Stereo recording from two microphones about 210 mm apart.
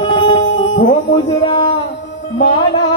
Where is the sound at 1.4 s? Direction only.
25° left (ahead or behind).